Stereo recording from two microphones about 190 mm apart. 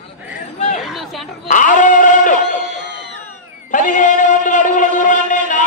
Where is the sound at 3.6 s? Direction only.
40° left (ahead or behind).